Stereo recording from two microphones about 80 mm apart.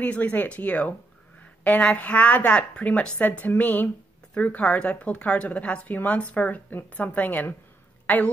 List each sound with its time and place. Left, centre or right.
0.0 s a woman's voice: centre